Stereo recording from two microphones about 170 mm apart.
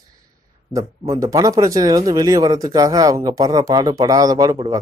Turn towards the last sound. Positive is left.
turn(degrees=-20)  # may be behind; listen again after turning